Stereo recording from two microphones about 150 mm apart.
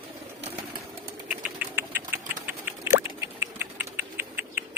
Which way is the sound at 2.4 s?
10° right (ahead or behind).